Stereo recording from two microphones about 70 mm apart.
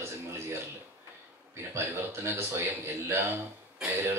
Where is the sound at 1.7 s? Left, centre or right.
Right.